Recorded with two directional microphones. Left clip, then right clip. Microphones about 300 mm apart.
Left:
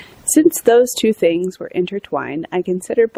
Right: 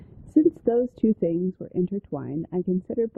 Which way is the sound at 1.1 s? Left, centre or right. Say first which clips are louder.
Left 10 dB; left.